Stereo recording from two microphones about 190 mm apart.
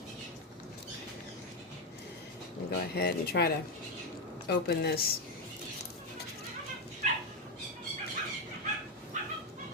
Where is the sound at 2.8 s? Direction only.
55° left (ahead or behind).